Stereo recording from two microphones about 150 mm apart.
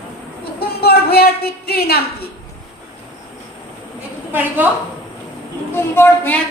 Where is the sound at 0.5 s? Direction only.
90° left.